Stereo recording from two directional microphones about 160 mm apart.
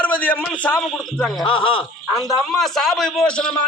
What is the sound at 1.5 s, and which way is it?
Speech, 35° left (ahead or behind).